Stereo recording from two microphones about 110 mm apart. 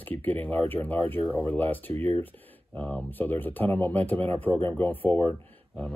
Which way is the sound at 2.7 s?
15° left (ahead or behind).